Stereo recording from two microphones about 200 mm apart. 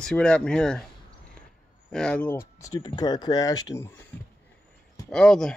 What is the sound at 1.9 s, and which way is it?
Speech, 5° left (ahead or behind).